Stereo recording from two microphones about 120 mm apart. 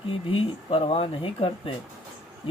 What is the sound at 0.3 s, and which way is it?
Speech, 50° left (ahead or behind).